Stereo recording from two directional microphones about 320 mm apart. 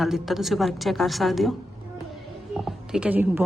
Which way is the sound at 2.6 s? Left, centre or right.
Centre.